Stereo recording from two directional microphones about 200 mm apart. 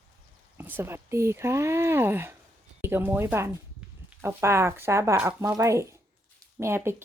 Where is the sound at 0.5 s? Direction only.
10° right (ahead or behind).